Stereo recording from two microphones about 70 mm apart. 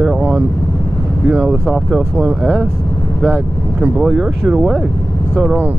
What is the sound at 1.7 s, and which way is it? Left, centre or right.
Speech, centre.